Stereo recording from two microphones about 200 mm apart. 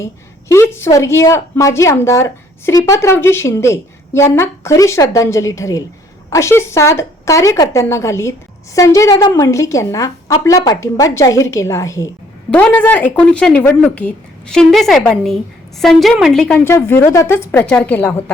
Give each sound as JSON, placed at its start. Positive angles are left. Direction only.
{"t": 0.0, "sound": "a woman's voice", "side_deg": 15}